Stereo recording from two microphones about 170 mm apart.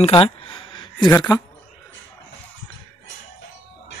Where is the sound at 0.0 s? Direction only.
35° left (ahead or behind).